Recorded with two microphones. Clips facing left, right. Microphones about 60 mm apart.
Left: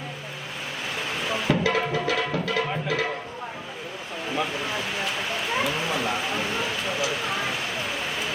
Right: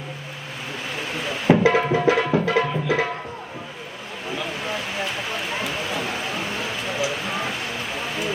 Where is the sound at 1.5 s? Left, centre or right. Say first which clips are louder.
Right 8 dB; right.